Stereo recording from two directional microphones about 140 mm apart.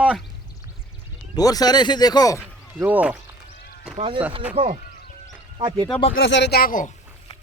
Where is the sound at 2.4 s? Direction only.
10° right (ahead or behind).